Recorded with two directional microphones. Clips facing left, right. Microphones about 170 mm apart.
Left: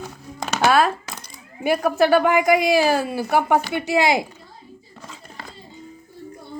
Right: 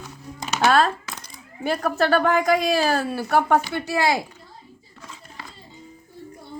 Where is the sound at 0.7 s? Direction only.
10° left (ahead or behind).